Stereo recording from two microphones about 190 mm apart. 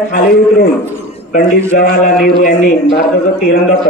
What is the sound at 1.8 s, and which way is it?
Speech, 50° left (ahead or behind).